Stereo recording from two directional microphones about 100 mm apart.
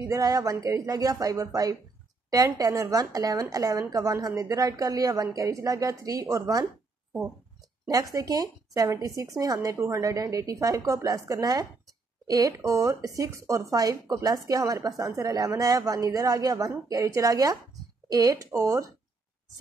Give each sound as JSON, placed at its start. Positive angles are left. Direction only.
{"t": 0.0, "sound": "a woman's voice", "side_deg": -35}
{"t": 7.8, "sound": "a woman's voice", "side_deg": -35}